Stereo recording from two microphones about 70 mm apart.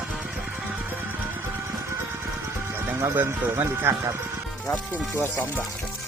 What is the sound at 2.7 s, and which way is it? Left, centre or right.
Music, right.